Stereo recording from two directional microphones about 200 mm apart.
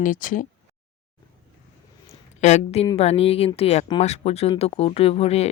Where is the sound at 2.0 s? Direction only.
35° left (ahead or behind).